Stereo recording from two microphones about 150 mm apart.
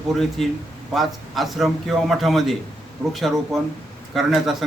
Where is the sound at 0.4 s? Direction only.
Centre (ahead or behind).